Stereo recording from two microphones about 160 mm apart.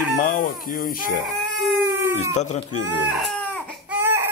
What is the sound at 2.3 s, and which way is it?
Speech, 45° left (ahead or behind).